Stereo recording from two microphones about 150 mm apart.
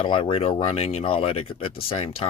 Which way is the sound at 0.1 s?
40° left (ahead or behind).